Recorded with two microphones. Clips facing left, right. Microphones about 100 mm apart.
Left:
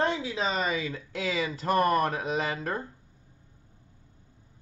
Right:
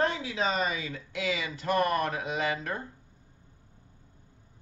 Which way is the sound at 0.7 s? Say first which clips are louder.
Left 3 dB; 30° left (ahead or behind).